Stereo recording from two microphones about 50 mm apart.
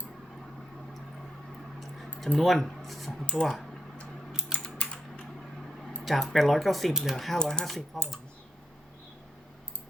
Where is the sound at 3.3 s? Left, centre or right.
Left.